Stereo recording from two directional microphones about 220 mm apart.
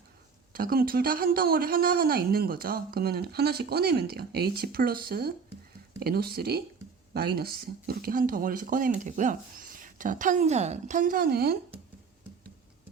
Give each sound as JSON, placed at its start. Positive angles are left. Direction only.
{"t": 0.5, "sound": "speech", "side_deg": -40}